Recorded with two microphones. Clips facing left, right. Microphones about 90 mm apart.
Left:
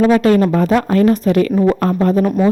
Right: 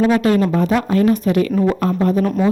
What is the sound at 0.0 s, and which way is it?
A woman's voice, 45° left (ahead or behind).